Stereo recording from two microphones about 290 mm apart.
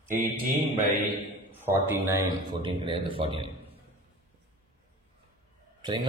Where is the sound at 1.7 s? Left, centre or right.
Centre.